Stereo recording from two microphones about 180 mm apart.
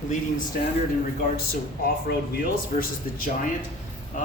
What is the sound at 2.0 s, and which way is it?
Speech, 55° left (ahead or behind).